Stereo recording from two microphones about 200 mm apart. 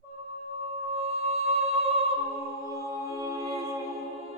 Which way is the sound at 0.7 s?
30° right (ahead or behind).